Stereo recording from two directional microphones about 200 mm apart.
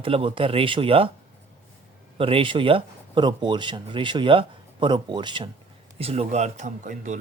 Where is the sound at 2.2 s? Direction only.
25° right (ahead or behind).